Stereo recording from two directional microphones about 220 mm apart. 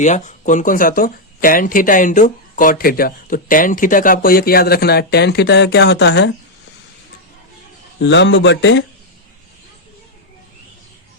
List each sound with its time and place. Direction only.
0.0 s speech: 35° left (ahead or behind); by 6.3 s 50° left (ahead or behind)
7.9 s speech: 55° left (ahead or behind)